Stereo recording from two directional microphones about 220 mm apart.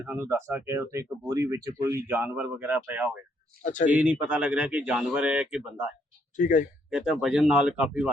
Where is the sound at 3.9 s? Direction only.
5° right (ahead or behind).